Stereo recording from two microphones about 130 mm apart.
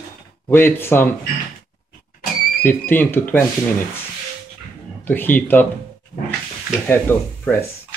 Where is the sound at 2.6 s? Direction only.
15° left (ahead or behind).